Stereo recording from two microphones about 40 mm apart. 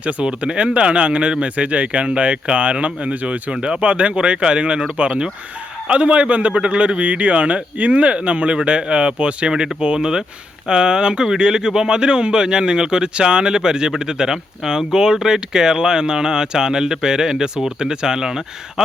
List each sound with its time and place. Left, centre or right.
0.0 s speech: right
3.5 s speech: right